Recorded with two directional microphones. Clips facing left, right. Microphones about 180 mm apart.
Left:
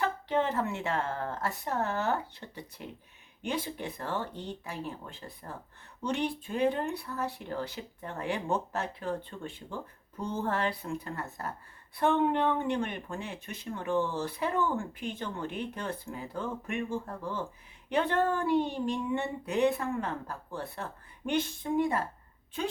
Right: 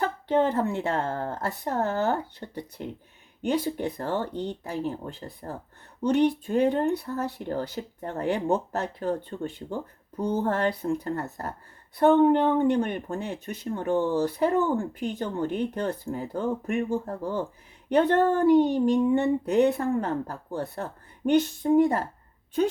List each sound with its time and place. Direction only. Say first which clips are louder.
0.0 s speech: right 5 dB; 40° right (ahead or behind)